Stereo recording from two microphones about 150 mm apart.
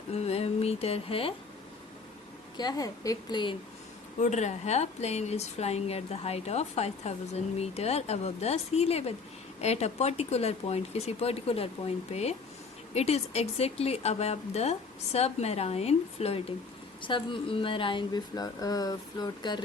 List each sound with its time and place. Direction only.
0.1 s a sound: 45° left (ahead or behind)
2.6 s speech: 25° left (ahead or behind)
4.2 s a woman's voice: 50° left (ahead or behind)
17.0 s speech: 35° left (ahead or behind)